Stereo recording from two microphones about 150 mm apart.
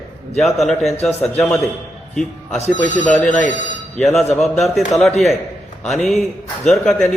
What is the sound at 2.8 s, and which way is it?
Speech, 55° left (ahead or behind).